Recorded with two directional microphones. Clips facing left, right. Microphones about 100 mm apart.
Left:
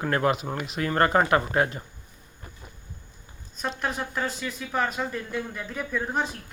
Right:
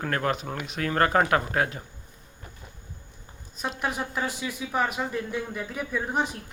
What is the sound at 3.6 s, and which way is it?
Speech, 10° right (ahead or behind).